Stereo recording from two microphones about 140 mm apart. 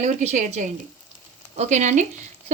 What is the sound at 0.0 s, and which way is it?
A woman's voice, 60° right (ahead or behind).